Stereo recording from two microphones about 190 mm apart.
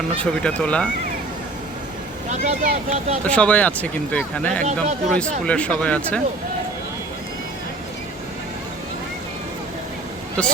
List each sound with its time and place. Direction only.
0.2 s speech: 5° left (ahead or behind)
2.3 s speech: 35° right (ahead or behind)
3.2 s speech: 5° left (ahead or behind)
4.6 s speech: 40° right (ahead or behind)
5.5 s speech: 5° left (ahead or behind)